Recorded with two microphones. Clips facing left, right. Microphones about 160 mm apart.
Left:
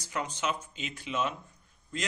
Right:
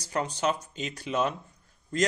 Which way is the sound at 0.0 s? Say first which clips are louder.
Right 5 dB; 35° right (ahead or behind).